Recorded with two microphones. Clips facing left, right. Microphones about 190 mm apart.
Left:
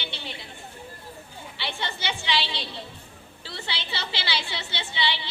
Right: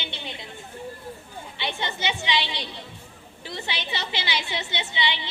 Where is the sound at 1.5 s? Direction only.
20° right (ahead or behind).